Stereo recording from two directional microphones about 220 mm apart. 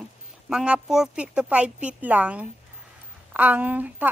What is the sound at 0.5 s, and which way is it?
A woman's voice, 5° right (ahead or behind).